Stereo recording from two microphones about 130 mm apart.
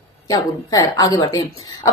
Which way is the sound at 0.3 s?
30° left (ahead or behind).